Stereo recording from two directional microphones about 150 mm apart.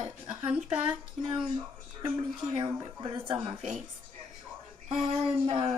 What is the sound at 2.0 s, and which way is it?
Speech, 30° right (ahead or behind).